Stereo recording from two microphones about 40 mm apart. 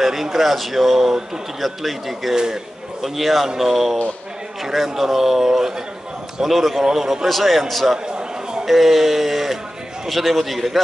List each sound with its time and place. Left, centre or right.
0.0 s a man's voice: centre
7.2 s a man's voice: centre